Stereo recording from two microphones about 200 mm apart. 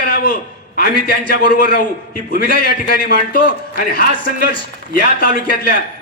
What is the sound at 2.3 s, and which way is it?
A man's voice, 50° left (ahead or behind).